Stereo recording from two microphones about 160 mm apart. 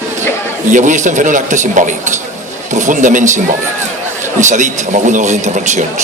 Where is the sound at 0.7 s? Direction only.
50° right (ahead or behind).